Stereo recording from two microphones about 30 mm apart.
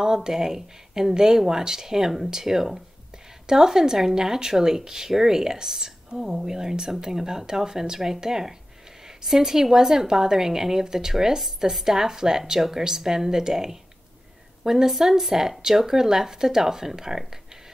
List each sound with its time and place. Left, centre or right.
0.0 s speech: right